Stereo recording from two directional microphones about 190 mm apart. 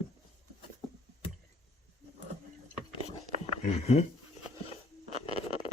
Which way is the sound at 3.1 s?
35° left (ahead or behind).